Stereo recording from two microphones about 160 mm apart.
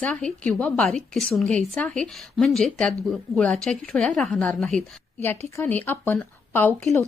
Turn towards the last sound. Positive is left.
turn(degrees=15)  # may be behind; listen again after turning